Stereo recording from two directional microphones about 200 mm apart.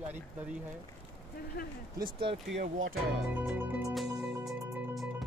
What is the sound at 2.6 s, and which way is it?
Speech, 80° right.